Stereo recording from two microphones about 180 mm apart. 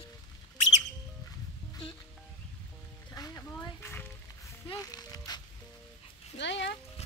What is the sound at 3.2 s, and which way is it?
Music, 15° left (ahead or behind).